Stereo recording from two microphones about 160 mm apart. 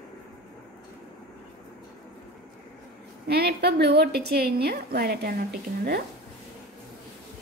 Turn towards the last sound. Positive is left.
turn(degrees=-75)  # may be behind; listen again after turning